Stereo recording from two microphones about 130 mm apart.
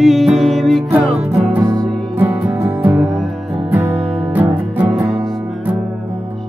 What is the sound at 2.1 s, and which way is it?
Music, 15° right (ahead or behind).